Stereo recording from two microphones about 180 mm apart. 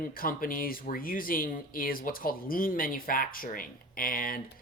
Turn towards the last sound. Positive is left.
turn(degrees=50)  # may be behind; listen again after turning